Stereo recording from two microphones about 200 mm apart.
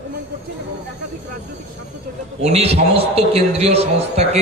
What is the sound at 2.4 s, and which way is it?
A man's voice, 30° right (ahead or behind).